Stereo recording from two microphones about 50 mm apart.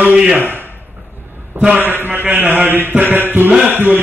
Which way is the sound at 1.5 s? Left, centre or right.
Right.